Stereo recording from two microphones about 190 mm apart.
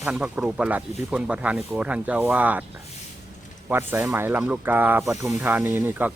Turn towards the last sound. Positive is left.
turn(degrees=-10)  # may be behind; listen again after turning